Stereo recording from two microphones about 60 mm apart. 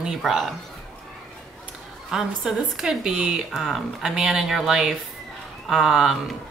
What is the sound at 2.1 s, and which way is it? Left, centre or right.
Speech, centre.